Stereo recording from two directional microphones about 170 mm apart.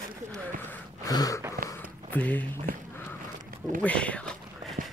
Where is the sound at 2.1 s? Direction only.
10° left (ahead or behind).